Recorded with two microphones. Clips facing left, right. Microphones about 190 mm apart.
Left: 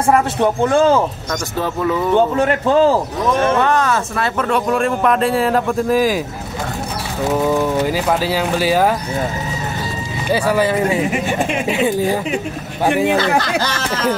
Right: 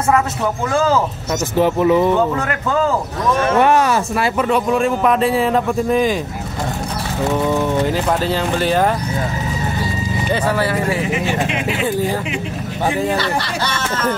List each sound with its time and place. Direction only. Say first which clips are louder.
0.4 s a man's voice: left 4 dB; 30° left (ahead or behind)
1.6 s speech: right 6 dB; 20° right (ahead or behind)
2.1 s a man's voice: left 4 dB; 30° left (ahead or behind)
3.6 s speech: right 2 dB; 15° right (ahead or behind); by 6.1 s centre (ahead or behind)
7.2 s speech: left 2 dB; 5° left (ahead or behind)
10.3 s speech: left 4 dB; 10° left (ahead or behind)